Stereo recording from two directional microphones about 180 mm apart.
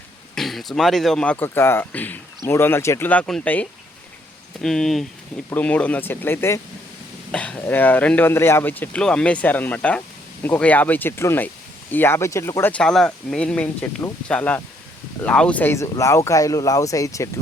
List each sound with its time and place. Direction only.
0.3 s speech: centre (ahead or behind); by 17.2 s 20° left (ahead or behind)